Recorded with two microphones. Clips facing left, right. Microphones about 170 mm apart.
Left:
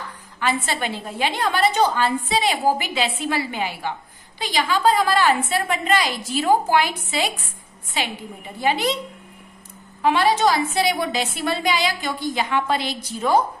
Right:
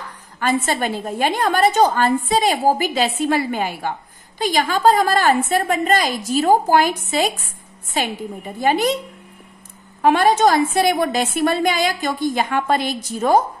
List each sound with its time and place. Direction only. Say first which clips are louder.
0.4 s a woman's voice: right 4 dB; 45° right (ahead or behind)
10.0 s a woman's voice: right 4 dB; 45° right (ahead or behind)